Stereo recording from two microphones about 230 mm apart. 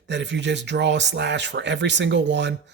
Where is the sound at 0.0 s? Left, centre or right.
Right.